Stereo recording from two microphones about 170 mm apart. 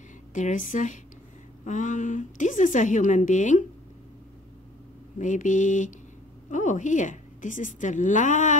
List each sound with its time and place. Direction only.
0.3 s a woman's voice: 50° left (ahead or behind)
5.2 s a woman's voice: 50° left (ahead or behind)